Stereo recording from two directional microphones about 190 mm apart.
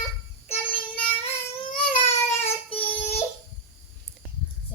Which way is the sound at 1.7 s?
30° left (ahead or behind).